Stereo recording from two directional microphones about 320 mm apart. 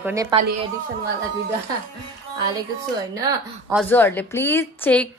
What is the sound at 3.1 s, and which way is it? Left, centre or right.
Speech, centre.